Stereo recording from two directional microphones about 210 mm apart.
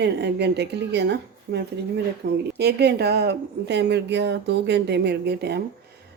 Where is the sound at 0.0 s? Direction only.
55° right (ahead or behind).